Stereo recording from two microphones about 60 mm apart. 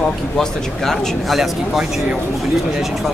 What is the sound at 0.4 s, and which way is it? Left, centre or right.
Speech, centre.